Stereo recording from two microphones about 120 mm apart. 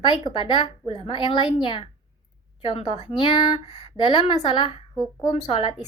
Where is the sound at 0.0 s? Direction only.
40° left (ahead or behind).